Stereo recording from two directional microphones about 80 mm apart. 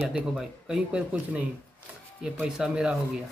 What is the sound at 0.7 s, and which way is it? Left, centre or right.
Speech, centre.